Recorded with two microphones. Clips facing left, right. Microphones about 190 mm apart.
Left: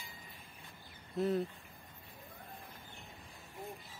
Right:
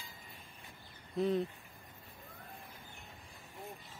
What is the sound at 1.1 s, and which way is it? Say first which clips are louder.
Speech: right 1 dB; 5° left (ahead or behind).